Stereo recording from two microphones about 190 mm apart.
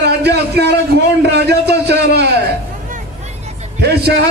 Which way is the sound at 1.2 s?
60° right (ahead or behind).